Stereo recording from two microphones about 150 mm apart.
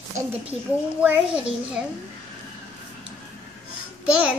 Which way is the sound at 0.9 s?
10° right (ahead or behind).